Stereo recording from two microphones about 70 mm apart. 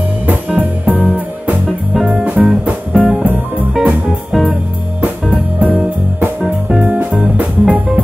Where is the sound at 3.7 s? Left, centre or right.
Centre.